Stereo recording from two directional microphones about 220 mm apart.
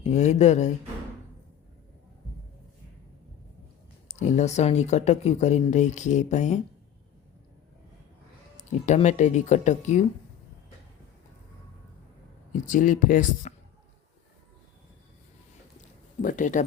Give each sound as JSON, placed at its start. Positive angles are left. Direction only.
{"t": 0.0, "sound": "speech", "side_deg": 30}
{"t": 4.2, "sound": "speech", "side_deg": 30}
{"t": 8.5, "sound": "speech", "side_deg": 30}
{"t": 12.6, "sound": "speech", "side_deg": 35}
{"t": 16.2, "sound": "speech", "side_deg": 35}